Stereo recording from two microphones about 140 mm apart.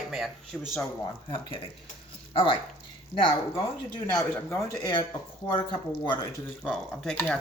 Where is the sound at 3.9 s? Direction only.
20° left (ahead or behind).